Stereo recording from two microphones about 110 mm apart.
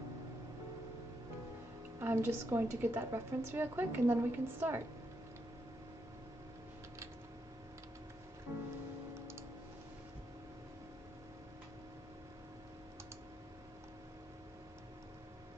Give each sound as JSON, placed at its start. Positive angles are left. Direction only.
{"t": 2.0, "sound": "a woman's voice", "side_deg": -20}